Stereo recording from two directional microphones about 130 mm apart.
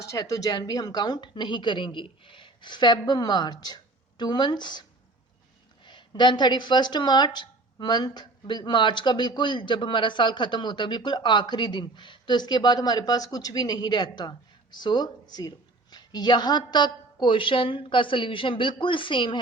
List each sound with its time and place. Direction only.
0.0 s a woman's voice: 25° left (ahead or behind)